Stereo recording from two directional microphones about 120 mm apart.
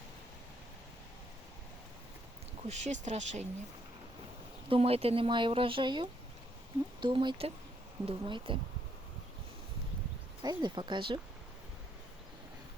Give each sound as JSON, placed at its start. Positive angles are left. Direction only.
{"t": 2.6, "sound": "speech", "side_deg": -70}
{"t": 4.7, "sound": "speech", "side_deg": -55}
{"t": 10.4, "sound": "speech", "side_deg": -40}